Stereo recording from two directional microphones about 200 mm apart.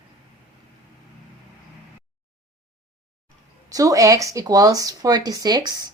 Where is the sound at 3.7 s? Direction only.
15° right (ahead or behind).